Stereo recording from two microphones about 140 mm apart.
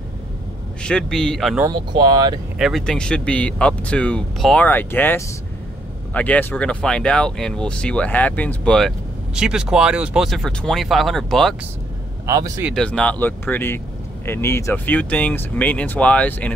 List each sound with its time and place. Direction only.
0.8 s speech: 5° left (ahead or behind)
1.7 s speech: 30° right (ahead or behind)
2.6 s speech: 5° left (ahead or behind)
9.3 s speech: 5° right (ahead or behind)
12.3 s speech: 20° right (ahead or behind)
12.7 s speech: 5° left (ahead or behind)